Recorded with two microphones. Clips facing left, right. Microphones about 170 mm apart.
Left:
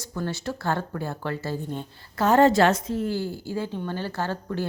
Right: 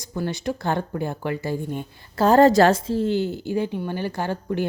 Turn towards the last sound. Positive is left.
turn(degrees=-15)  # may be behind; listen again after turning